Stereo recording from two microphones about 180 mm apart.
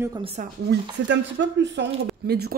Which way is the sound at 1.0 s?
80° right.